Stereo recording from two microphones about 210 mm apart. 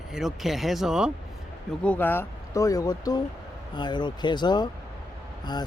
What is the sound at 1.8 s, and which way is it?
Speech, 10° left (ahead or behind).